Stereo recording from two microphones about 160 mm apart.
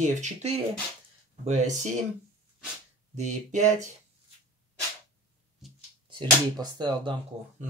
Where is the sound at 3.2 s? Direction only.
45° right (ahead or behind).